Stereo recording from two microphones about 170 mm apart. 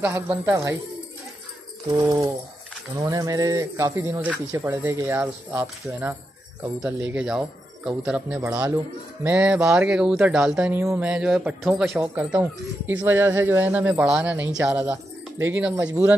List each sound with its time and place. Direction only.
0.0 s speech: 15° right (ahead or behind)
1.9 s speech: 25° right (ahead or behind); by 15.9 s 10° right (ahead or behind)